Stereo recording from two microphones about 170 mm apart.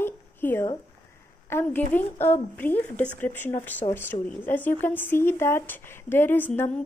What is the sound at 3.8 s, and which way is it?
Speech, 35° left (ahead or behind).